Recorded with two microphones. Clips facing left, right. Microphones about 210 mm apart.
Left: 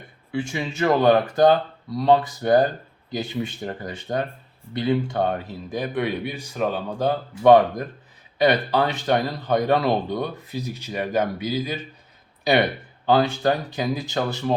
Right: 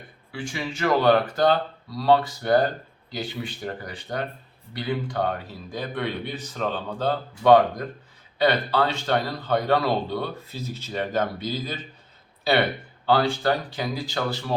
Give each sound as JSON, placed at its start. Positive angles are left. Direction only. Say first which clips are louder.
{"t": 0.3, "sound": "speech", "louder": "left 4 dB", "side_deg": 20}